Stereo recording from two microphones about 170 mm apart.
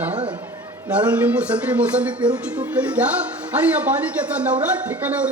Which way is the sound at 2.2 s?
20° right (ahead or behind).